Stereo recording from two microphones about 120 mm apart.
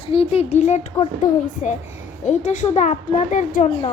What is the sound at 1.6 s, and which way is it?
Speech, 80° left.